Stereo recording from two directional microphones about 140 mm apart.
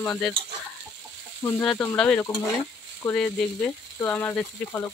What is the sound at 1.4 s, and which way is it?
Speech, 15° left (ahead or behind).